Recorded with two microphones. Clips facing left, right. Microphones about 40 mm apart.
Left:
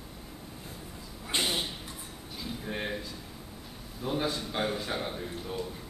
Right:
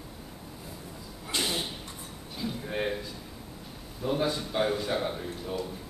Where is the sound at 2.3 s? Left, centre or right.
Centre.